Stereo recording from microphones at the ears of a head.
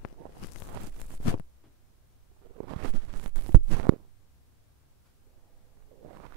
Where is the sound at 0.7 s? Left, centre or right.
Right.